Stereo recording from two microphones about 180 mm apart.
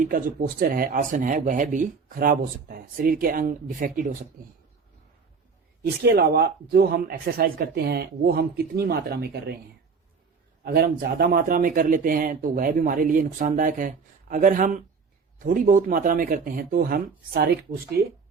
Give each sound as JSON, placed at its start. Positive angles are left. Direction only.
{"t": 0.0, "sound": "speech", "side_deg": -50}
{"t": 5.8, "sound": "speech", "side_deg": -60}
{"t": 10.6, "sound": "speech", "side_deg": -60}